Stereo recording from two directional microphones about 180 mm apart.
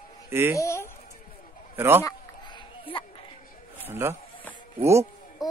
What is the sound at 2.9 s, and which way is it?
Speech, 30° left (ahead or behind).